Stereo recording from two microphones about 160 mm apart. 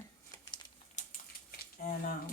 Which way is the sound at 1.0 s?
50° left (ahead or behind).